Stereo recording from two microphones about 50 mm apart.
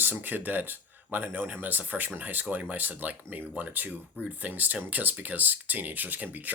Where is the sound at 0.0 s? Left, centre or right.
Right.